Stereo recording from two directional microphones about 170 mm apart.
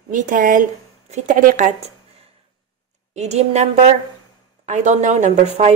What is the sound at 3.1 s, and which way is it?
A woman's voice, 40° right (ahead or behind).